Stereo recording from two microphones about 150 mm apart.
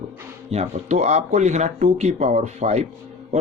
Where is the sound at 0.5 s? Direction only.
45° right (ahead or behind).